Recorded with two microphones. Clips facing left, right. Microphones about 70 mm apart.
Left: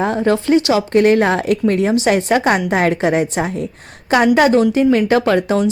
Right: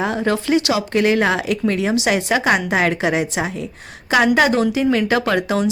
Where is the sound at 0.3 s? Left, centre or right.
Left.